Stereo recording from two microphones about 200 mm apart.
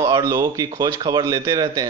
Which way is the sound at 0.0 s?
20° right (ahead or behind).